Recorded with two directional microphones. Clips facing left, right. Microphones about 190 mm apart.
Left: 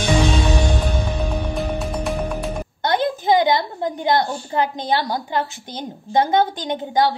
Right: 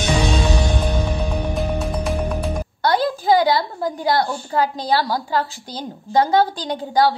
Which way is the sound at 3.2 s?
20° left (ahead or behind).